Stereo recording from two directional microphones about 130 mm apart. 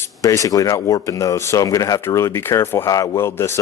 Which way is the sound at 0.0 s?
25° left (ahead or behind).